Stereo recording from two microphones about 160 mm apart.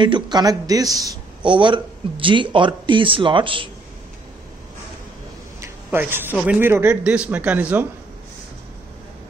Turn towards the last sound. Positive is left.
turn(degrees=-10)  # may be behind; listen again after turning